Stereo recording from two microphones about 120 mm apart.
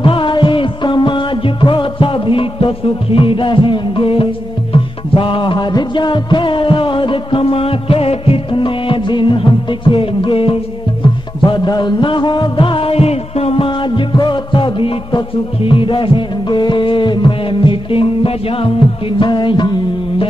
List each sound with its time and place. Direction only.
0.0 s music: 45° left (ahead or behind)